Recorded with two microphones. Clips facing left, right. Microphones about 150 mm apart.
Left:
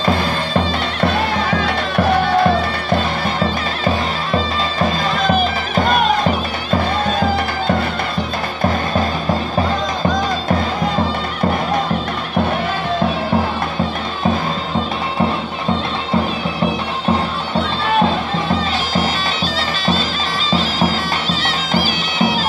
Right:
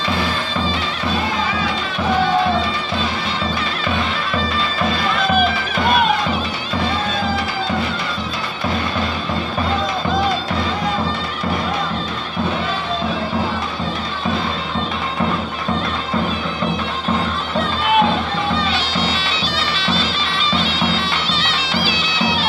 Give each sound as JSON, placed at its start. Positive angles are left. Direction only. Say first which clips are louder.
{"t": 0.0, "sound": "music", "louder": "left 4 dB", "side_deg": 50}
{"t": 18.9, "sound": "bagpipes", "louder": "left 3 dB", "side_deg": 50}